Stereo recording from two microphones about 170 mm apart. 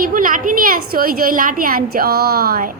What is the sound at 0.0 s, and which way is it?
A woman's voice, 55° right (ahead or behind).